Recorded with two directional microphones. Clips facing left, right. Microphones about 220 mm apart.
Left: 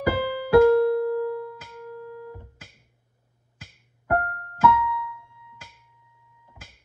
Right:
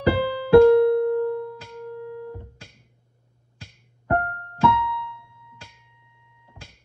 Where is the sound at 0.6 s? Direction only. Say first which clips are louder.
Right 3 dB; 25° right (ahead or behind).